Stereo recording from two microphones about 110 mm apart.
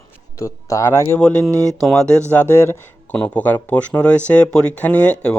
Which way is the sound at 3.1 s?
10° left (ahead or behind).